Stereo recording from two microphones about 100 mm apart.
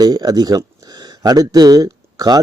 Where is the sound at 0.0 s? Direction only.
40° right (ahead or behind).